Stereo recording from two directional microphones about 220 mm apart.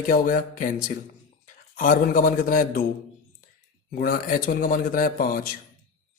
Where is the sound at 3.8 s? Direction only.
40° left (ahead or behind).